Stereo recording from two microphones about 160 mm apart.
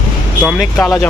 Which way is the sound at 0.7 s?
15° left (ahead or behind).